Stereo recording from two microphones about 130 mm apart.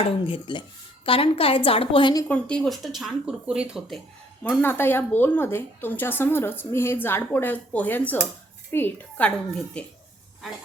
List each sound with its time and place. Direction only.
0.0 s a woman's voice: 40° left (ahead or behind)
2.2 s speech: 10° left (ahead or behind)
4.6 s a woman's voice: 15° left (ahead or behind)